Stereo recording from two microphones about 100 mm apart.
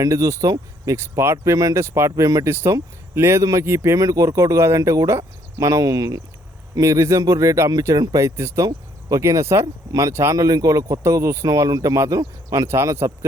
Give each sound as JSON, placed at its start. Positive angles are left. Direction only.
{"t": 0.0, "sound": "speech", "side_deg": -30}